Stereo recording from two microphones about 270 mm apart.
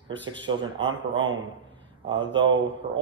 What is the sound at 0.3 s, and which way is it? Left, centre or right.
Speech, centre.